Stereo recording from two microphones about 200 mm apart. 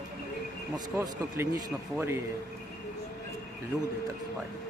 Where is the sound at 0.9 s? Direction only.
15° right (ahead or behind).